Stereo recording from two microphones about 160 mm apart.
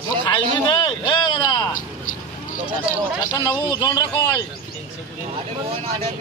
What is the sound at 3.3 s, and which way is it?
Speech, 20° left (ahead or behind).